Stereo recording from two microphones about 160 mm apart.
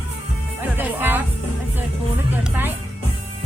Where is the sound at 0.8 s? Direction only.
10° right (ahead or behind).